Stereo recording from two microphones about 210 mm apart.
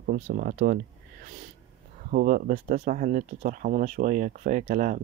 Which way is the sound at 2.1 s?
40° right (ahead or behind).